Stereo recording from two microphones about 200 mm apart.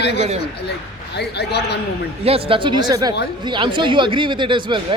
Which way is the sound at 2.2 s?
30° right (ahead or behind).